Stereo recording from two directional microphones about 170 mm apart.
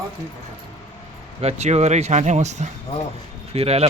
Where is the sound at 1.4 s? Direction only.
40° right (ahead or behind).